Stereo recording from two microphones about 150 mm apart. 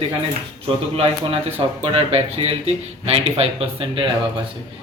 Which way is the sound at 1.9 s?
40° right (ahead or behind).